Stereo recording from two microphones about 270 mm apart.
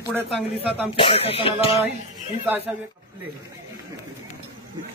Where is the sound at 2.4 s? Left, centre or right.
Centre.